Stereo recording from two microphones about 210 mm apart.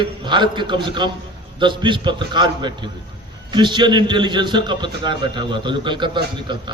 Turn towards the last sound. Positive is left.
turn(degrees=-20)  # may be behind; listen again after turning